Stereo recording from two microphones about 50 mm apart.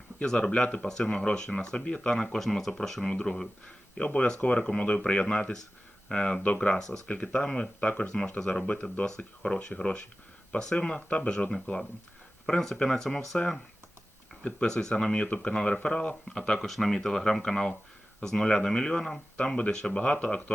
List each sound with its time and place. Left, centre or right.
0.3 s speech: centre
12.5 s speech: centre
14.4 s speech: centre
16.6 s speech: centre